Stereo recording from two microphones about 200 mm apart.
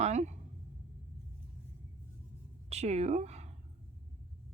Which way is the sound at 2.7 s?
35° right (ahead or behind).